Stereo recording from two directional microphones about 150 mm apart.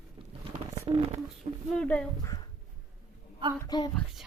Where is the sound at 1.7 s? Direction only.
5° left (ahead or behind).